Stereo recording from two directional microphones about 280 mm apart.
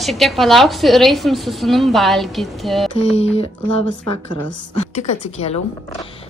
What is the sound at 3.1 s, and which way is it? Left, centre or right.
Speech, left.